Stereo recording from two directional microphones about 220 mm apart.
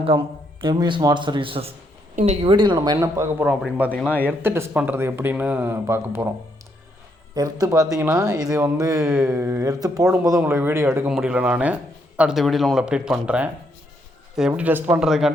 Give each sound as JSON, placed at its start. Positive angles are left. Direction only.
{"t": 0.6, "sound": "a man's voice", "side_deg": -20}
{"t": 3.9, "sound": "a man's voice", "side_deg": 5}
{"t": 4.3, "sound": "speech", "side_deg": -10}
{"t": 7.3, "sound": "speech", "side_deg": -15}